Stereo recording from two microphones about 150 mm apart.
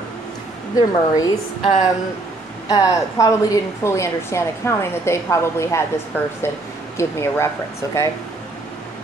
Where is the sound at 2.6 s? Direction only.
25° left (ahead or behind).